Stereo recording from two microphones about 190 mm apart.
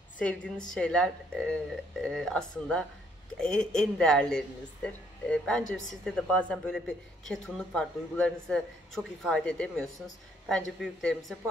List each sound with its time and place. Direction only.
0.2 s speech: 5° left (ahead or behind)
5.6 s a woman's voice: 40° left (ahead or behind)
6.0 s speech: 5° left (ahead or behind)